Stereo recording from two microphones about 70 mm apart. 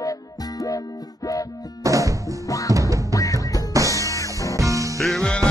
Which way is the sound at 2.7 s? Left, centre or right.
Right.